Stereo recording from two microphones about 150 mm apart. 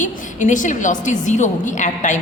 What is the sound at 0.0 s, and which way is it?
A woman's voice, 55° left (ahead or behind).